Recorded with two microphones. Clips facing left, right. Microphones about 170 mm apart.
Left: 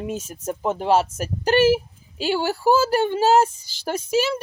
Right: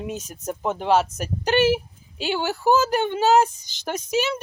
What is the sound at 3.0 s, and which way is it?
Speech, 40° left (ahead or behind).